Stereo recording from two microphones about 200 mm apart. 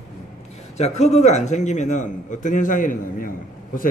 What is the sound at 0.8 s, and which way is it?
A man's voice, 35° left (ahead or behind).